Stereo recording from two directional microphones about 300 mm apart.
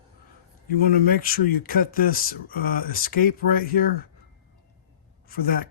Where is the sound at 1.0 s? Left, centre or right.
Left.